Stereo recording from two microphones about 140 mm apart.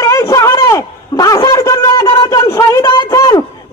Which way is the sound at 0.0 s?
20° left (ahead or behind).